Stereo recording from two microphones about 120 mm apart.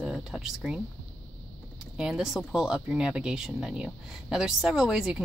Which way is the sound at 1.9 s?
5° right (ahead or behind).